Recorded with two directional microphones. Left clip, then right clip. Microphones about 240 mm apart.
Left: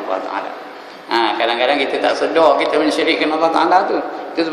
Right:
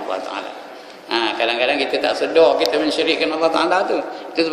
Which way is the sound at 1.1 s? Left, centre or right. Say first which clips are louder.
Left 3 dB; centre.